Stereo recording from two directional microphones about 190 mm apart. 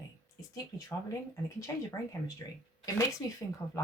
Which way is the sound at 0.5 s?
20° left (ahead or behind).